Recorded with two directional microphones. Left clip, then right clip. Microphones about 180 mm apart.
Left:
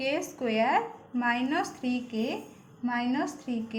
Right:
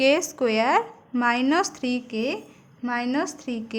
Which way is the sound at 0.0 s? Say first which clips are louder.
Right 10 dB; 50° right (ahead or behind).